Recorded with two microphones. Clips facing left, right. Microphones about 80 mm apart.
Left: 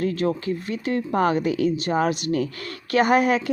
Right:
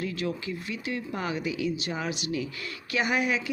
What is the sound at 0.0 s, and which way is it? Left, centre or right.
A woman's voice, left.